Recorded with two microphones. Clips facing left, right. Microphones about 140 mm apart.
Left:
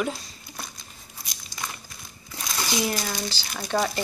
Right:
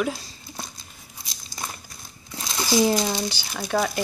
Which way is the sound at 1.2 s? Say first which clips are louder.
Right 1 dB; 30° right (ahead or behind).